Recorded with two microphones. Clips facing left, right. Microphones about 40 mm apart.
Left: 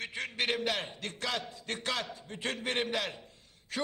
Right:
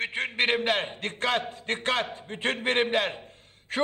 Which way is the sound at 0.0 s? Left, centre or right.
Right.